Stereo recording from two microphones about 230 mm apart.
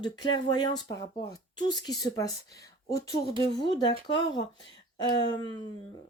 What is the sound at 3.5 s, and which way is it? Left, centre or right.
Speech, centre.